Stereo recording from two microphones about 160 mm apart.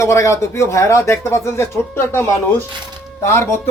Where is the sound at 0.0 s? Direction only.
20° left (ahead or behind).